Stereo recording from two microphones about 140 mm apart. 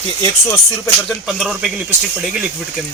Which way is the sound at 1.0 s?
Centre (ahead or behind).